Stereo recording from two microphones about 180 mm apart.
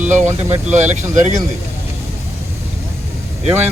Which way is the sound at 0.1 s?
40° right (ahead or behind).